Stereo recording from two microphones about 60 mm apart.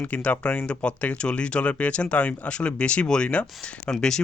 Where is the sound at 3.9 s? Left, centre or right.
Centre.